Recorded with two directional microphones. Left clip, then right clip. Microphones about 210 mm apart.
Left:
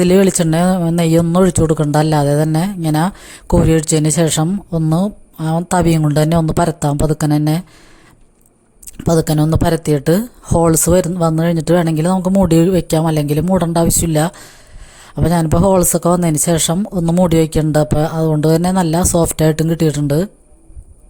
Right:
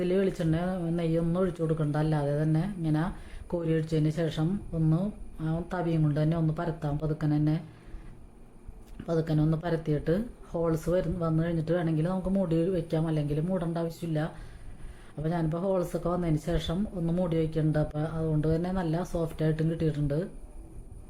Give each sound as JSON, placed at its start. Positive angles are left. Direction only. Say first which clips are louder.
{"t": 0.0, "sound": "speech", "louder": "left 15 dB", "side_deg": 50}
{"t": 9.0, "sound": "speech", "louder": "left 14 dB", "side_deg": 50}